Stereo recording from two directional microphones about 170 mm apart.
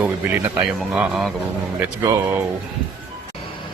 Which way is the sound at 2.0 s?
15° right (ahead or behind).